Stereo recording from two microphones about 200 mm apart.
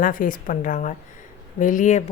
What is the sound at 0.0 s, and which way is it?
Speech, 40° left (ahead or behind).